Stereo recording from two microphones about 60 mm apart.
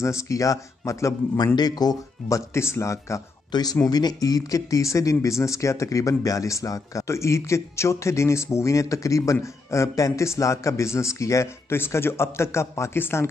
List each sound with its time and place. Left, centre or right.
0.0 s speech: left
3.8 s speech: left
5.1 s speech: left
10.2 s speech: left
11.7 s a man's voice: left